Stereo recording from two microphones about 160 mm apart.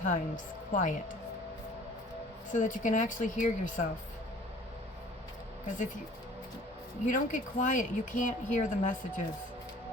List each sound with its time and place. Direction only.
0.0 s speech: 55° left (ahead or behind)
2.5 s speech: 55° left (ahead or behind)
5.6 s speech: 50° left (ahead or behind)
7.0 s speech: 50° left (ahead or behind)